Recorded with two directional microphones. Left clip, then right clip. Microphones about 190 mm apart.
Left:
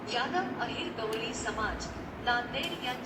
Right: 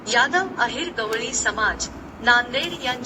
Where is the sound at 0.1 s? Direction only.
60° right (ahead or behind).